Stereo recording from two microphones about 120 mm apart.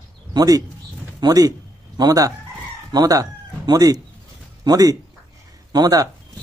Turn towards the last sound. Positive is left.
turn(degrees=-30)  # may be behind; listen again after turning